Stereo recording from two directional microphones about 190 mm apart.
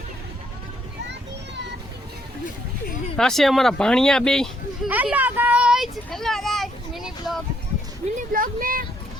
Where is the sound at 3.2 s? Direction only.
Centre (ahead or behind).